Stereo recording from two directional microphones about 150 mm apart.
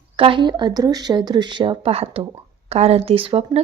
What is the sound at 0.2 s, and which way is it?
Speech, 35° right (ahead or behind).